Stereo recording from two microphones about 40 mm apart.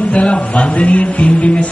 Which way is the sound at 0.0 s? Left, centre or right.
Left.